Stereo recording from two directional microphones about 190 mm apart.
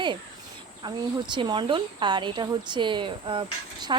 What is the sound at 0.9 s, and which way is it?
Speech, 25° right (ahead or behind).